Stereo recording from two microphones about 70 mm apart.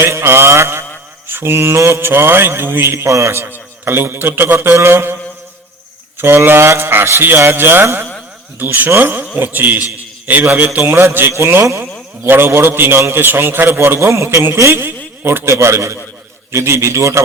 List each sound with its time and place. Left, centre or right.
0.0 s mantra: right
1.3 s a man's voice: right
3.4 s a man's voice: right
6.1 s a man's voice: right